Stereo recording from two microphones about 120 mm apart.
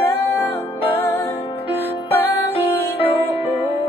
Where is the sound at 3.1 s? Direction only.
20° right (ahead or behind).